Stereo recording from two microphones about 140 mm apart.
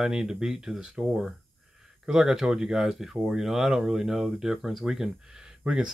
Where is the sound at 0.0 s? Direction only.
5° right (ahead or behind).